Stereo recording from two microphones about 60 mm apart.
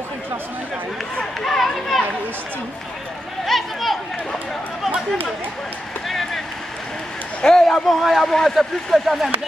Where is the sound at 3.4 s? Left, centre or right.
Centre.